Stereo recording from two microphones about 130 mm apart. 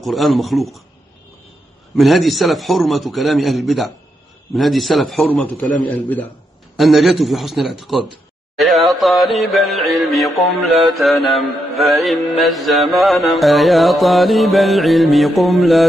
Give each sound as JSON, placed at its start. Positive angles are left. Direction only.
{"t": 0.0, "sound": "music", "side_deg": 0}
{"t": 2.0, "sound": "music", "side_deg": 0}
{"t": 5.3, "sound": "a man's voice", "side_deg": 10}
{"t": 6.8, "sound": "music", "side_deg": 0}